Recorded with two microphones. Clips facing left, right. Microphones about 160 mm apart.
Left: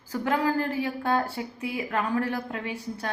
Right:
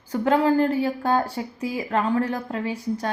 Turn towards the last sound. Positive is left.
turn(degrees=-35)  # may be behind; listen again after turning